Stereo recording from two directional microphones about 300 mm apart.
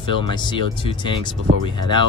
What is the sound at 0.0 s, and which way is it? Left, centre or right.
Speech, centre.